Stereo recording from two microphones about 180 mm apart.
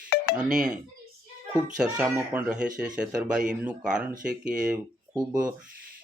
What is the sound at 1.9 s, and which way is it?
Speech, 5° right (ahead or behind).